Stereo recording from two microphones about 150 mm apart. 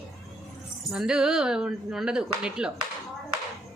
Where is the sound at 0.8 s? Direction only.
5° right (ahead or behind).